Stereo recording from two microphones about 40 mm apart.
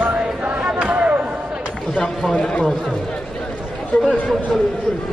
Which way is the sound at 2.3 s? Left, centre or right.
Left.